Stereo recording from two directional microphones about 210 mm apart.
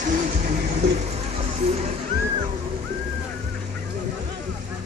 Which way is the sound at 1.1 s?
30° right (ahead or behind).